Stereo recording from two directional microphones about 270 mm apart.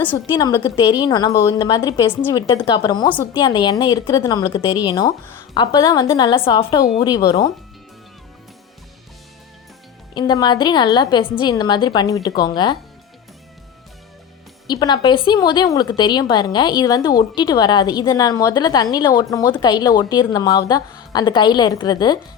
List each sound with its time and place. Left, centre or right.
0.0 s a woman's voice: centre
10.2 s a woman's voice: centre
14.7 s a woman's voice: centre